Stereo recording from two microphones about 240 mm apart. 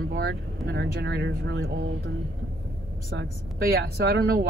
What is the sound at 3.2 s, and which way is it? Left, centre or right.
Speech, right.